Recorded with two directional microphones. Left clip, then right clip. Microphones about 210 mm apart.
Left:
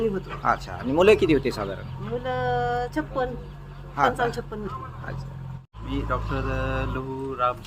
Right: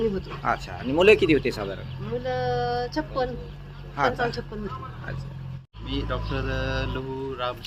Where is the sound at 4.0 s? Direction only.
Centre (ahead or behind).